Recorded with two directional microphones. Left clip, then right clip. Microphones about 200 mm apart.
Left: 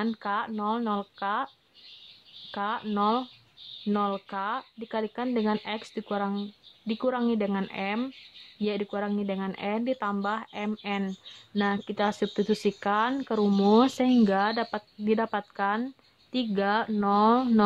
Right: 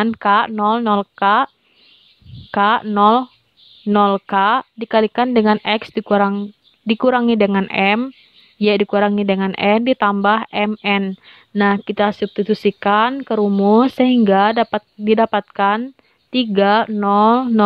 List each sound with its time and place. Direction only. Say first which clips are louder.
0.0 s speech: right 15 dB; 35° right (ahead or behind)
2.5 s speech: right 15 dB; 35° right (ahead or behind)